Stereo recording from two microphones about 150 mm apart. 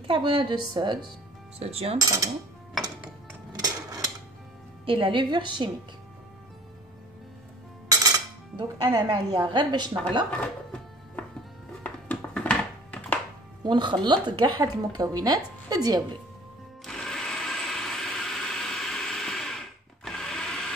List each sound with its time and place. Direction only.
0.0 s a woman's voice: 35° right (ahead or behind)
1.6 s cutlery: 45° right (ahead or behind)
2.0 s speech: 20° right (ahead or behind)
3.5 s a sound: 25° right (ahead or behind)
4.8 s a woman's voice: 35° right (ahead or behind)
8.5 s speech: 30° right (ahead or behind)
10.3 s music: 10° left (ahead or behind)
13.7 s speech: 30° right (ahead or behind)
16.8 s a sound: 5° left (ahead or behind)